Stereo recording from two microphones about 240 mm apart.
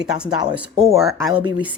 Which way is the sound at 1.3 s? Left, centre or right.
Centre.